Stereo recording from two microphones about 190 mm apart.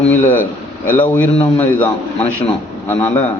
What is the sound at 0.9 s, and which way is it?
Speech, 10° left (ahead or behind).